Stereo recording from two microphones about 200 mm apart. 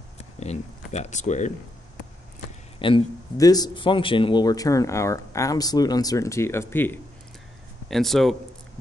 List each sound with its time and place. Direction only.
0.4 s speech: 35° left (ahead or behind)
2.8 s speech: 20° left (ahead or behind); by 8.4 s centre (ahead or behind)